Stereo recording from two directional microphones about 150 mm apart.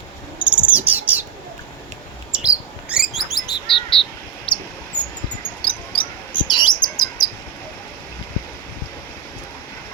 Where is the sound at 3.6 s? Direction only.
35° left (ahead or behind).